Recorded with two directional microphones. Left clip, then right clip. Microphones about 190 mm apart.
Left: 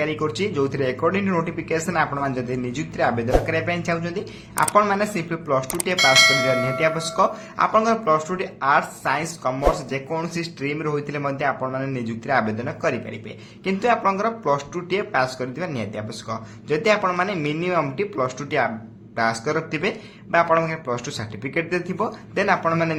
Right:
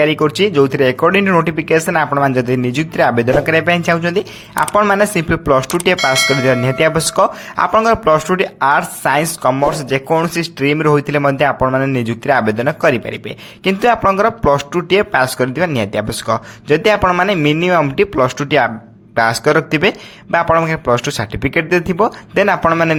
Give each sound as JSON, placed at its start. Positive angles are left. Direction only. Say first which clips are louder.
{"t": 0.0, "sound": "speech", "louder": "right 11 dB", "side_deg": -50}
{"t": 6.0, "sound": "speech", "louder": "right 2 dB", "side_deg": 0}
{"t": 6.7, "sound": "speech", "louder": "right 8 dB", "side_deg": -50}